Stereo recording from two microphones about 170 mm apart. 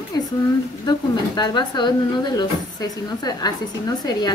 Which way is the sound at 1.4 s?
25° left (ahead or behind).